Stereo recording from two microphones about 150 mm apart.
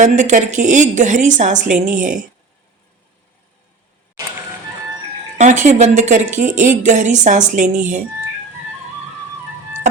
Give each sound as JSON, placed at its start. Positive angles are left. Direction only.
{"t": 0.0, "sound": "a woman's voice", "side_deg": -55}
{"t": 5.6, "sound": "a woman's voice", "side_deg": -50}